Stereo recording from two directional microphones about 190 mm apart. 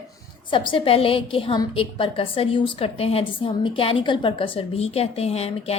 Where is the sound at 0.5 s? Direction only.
25° left (ahead or behind).